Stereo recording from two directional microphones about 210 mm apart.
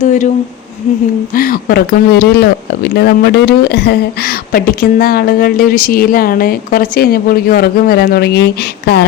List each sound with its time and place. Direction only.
0.0 s speech: 35° left (ahead or behind)
1.4 s a woman's voice: 45° left (ahead or behind)